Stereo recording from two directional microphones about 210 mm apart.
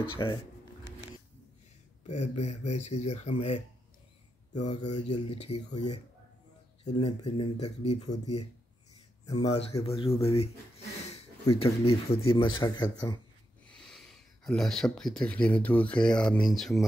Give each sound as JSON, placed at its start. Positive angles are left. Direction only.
{"t": 0.2, "sound": "speech", "side_deg": 20}
{"t": 2.0, "sound": "speech", "side_deg": 30}
{"t": 9.2, "sound": "speech", "side_deg": 15}
{"t": 9.5, "sound": "speech", "side_deg": 30}
{"t": 11.6, "sound": "speech", "side_deg": 25}
{"t": 13.7, "sound": "speech", "side_deg": 0}